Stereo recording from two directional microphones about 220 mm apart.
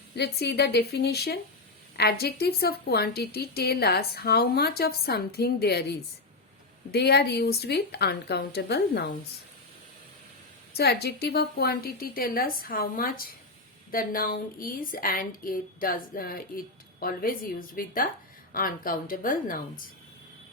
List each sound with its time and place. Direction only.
0.2 s a woman's voice: 45° left (ahead or behind)
10.8 s a woman's voice: 45° left (ahead or behind)